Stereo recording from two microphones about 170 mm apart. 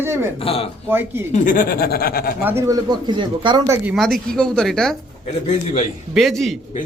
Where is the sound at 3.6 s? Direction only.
15° right (ahead or behind).